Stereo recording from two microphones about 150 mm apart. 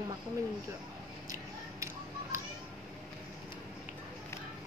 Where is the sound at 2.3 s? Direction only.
20° right (ahead or behind).